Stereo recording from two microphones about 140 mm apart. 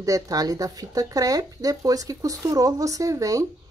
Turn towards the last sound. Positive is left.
turn(degrees=-25)  # may be behind; listen again after turning